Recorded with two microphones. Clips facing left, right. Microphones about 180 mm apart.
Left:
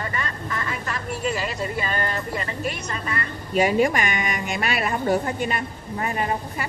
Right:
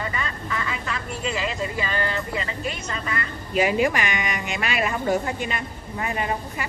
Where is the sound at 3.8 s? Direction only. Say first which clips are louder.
Left 1 dB; 45° left (ahead or behind).